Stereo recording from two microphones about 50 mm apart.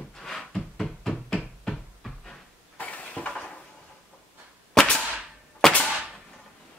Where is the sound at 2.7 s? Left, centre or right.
Left.